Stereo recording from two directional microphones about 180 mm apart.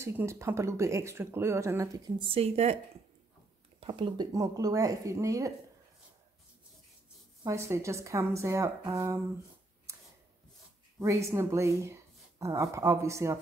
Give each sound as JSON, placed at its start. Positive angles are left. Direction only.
{"t": 0.0, "sound": "speech", "side_deg": -15}
{"t": 3.8, "sound": "speech", "side_deg": -25}
{"t": 7.4, "sound": "speech", "side_deg": -15}
{"t": 11.0, "sound": "speech", "side_deg": -15}